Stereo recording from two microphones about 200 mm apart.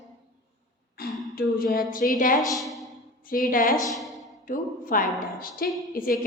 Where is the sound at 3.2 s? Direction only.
45° left (ahead or behind).